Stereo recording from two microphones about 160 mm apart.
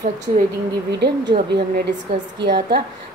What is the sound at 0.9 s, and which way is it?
Speech, 90° right.